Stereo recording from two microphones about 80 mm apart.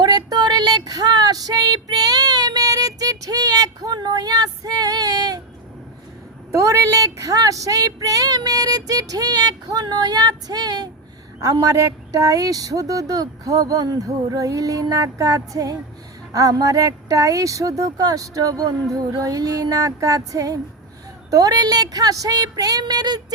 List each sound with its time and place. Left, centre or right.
0.0 s child singing: right
6.5 s speech: right